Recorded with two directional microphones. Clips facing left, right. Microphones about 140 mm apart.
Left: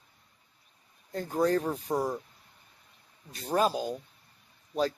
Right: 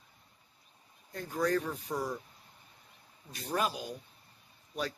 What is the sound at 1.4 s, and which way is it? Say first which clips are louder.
Speech: left 4 dB; 35° left (ahead or behind).